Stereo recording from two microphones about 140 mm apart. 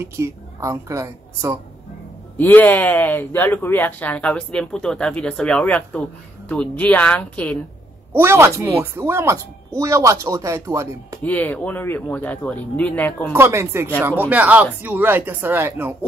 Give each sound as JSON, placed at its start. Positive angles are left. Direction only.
{"t": 0.0, "sound": "a woman's voice", "side_deg": -20}
{"t": 2.3, "sound": "speech", "side_deg": 15}
{"t": 8.1, "sound": "speech", "side_deg": -15}
{"t": 11.2, "sound": "speech", "side_deg": 10}
{"t": 13.3, "sound": "speech", "side_deg": -20}